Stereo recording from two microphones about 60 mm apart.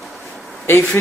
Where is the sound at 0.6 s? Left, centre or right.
Left.